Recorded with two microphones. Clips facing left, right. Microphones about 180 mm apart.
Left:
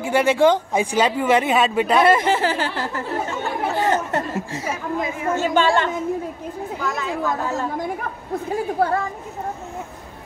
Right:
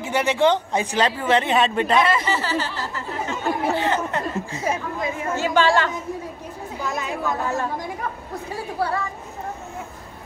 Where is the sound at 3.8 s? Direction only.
45° left (ahead or behind).